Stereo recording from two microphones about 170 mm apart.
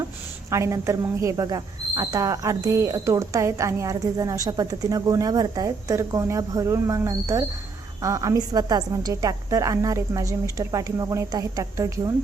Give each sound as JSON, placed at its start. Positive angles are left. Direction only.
{"t": 0.5, "sound": "speech", "side_deg": -15}